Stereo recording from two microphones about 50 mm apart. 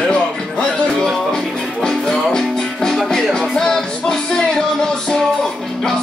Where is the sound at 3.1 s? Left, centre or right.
Centre.